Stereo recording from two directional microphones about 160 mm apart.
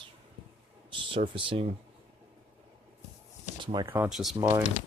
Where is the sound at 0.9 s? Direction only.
30° right (ahead or behind).